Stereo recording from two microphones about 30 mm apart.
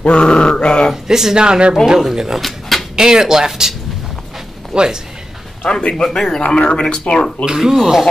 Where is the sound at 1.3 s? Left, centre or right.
Right.